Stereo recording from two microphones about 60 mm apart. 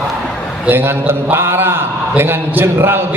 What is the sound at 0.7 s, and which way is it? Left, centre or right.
A man's voice, right.